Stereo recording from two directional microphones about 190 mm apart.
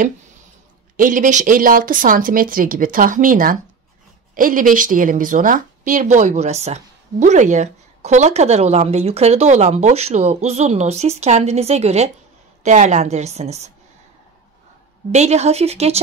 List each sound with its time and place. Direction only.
0.9 s speech: 45° right (ahead or behind)
15.0 s speech: 35° right (ahead or behind)